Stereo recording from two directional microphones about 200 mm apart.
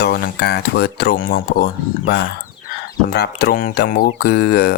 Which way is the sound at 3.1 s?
55° left (ahead or behind).